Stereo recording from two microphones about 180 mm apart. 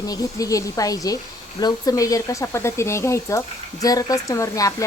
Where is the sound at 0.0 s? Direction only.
20° left (ahead or behind).